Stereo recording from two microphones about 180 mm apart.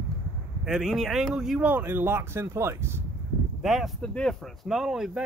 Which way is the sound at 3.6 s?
Centre (ahead or behind).